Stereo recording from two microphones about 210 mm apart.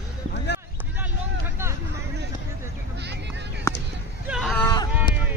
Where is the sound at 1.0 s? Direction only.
10° right (ahead or behind).